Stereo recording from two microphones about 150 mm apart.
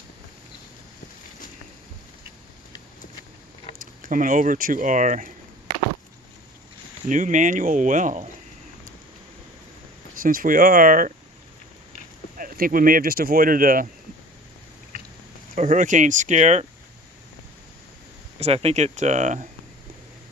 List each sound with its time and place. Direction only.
4.0 s speech: 60° right (ahead or behind)
7.1 s speech: 55° right (ahead or behind)
10.2 s speech: 65° right (ahead or behind)
12.4 s speech: 70° right (ahead or behind)
15.5 s speech: 55° right (ahead or behind)
18.3 s speech: 45° right (ahead or behind)